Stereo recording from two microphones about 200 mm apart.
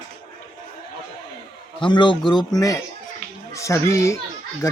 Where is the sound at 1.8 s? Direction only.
25° left (ahead or behind).